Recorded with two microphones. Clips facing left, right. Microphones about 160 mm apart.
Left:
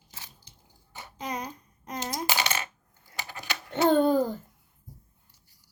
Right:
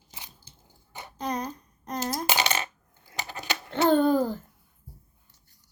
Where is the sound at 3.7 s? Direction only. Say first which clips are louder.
Even; 25° right (ahead or behind).